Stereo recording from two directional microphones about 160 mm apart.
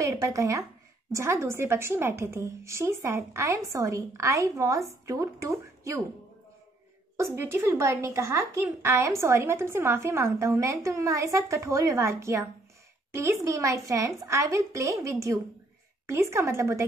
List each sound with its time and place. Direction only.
0.0 s a woman's voice: 20° right (ahead or behind)
7.2 s a woman's voice: 15° right (ahead or behind)